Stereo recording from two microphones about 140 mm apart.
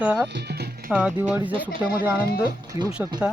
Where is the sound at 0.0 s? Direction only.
10° right (ahead or behind).